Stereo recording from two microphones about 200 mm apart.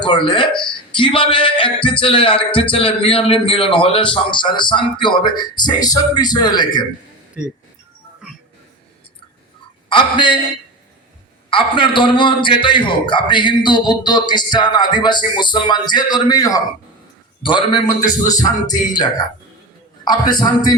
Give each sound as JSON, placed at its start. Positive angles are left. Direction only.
{"t": 0.0, "sound": "speech", "side_deg": 25}
{"t": 9.9, "sound": "speech", "side_deg": 25}
{"t": 11.5, "sound": "speech", "side_deg": 25}